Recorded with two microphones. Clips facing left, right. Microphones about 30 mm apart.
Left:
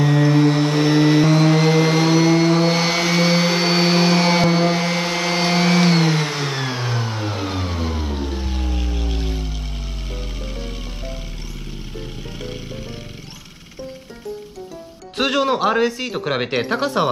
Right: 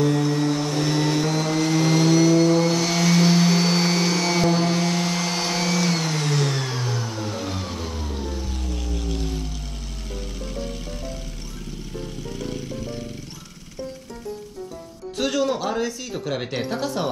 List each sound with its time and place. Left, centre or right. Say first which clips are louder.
0.0 s mantra: left 5 dB; left
1.2 s vehicle: left 7 dB; left
12.3 s vehicle: right 2 dB; left
15.1 s speech: left 4 dB; left